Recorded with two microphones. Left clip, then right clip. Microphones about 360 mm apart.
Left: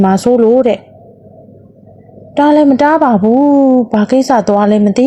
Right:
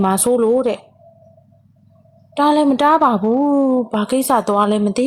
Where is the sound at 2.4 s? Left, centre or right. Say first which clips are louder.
Left 6 dB; centre.